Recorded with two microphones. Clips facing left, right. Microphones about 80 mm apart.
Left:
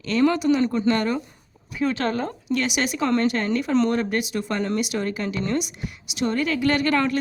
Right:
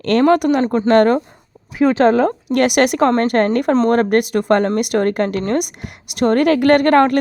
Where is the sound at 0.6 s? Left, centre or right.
Right.